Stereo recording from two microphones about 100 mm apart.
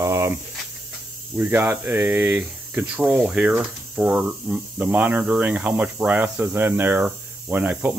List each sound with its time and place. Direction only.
0.0 s a sound: 30° right (ahead or behind)
1.3 s speech: 20° right (ahead or behind)
3.1 s speech: 5° right (ahead or behind)